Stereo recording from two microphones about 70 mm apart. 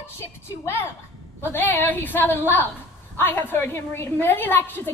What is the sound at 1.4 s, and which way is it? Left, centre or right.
A woman's voice, left.